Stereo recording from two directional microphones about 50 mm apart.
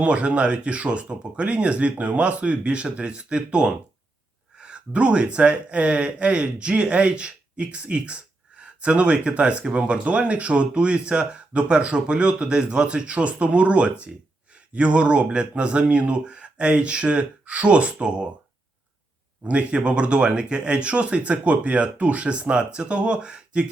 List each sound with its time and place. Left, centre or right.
0.0 s speech: right
4.5 s a sound: centre
4.9 s speech: right
19.5 s speech: right